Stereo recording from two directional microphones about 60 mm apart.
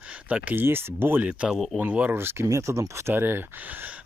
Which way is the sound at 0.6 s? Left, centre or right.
Right.